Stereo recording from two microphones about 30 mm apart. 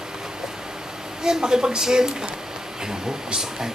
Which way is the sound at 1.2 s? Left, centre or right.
Right.